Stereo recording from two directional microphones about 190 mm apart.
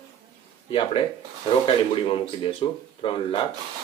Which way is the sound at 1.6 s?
30° left (ahead or behind).